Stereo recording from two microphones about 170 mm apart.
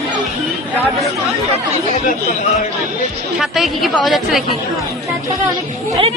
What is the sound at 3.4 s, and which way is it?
Speech, centre (ahead or behind).